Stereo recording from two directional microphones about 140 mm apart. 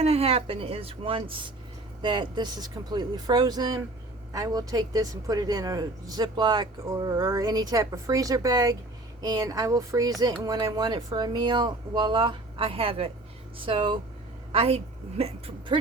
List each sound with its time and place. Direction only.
0.0 s speech: 45° right (ahead or behind)